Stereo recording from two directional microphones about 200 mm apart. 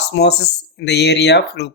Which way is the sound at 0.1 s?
55° left (ahead or behind).